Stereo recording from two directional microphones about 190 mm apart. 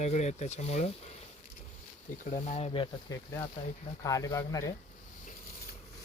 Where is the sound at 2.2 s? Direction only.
40° left (ahead or behind); by 4.7 s 15° left (ahead or behind).